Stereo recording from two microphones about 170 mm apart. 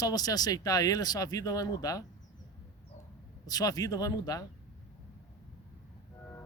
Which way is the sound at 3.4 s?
20° left (ahead or behind).